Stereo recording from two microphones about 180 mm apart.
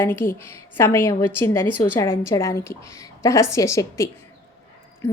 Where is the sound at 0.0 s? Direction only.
15° left (ahead or behind).